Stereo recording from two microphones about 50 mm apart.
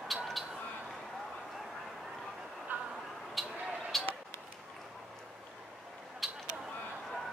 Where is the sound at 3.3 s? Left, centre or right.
Centre.